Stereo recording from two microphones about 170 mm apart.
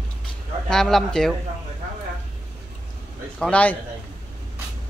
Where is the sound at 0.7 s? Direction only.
5° left (ahead or behind).